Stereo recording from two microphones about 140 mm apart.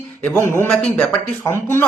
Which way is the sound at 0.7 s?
5° left (ahead or behind).